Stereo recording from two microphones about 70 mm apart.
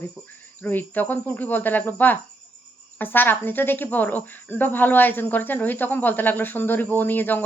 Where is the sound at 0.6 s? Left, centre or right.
Left.